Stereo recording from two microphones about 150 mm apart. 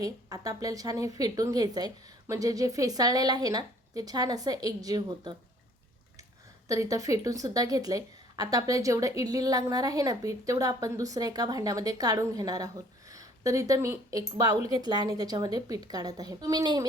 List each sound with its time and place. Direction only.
0.0 s a woman's voice: 25° right (ahead or behind)
6.7 s a woman's voice: 20° right (ahead or behind)